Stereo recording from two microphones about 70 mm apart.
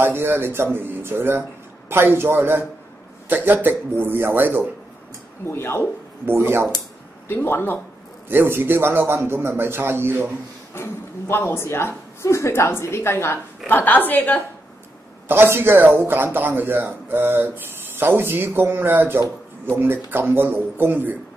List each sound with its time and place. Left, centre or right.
0.0 s a man's voice: right
5.4 s speech: left
6.2 s a man's voice: right
7.2 s speech: left
8.3 s a man's voice: right
10.7 s speech: left
15.2 s a man's voice: right